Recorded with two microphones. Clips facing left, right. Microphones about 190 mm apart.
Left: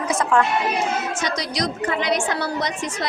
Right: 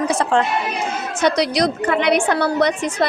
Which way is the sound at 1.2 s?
65° right (ahead or behind).